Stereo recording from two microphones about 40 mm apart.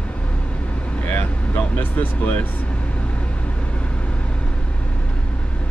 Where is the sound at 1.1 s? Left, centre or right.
Left.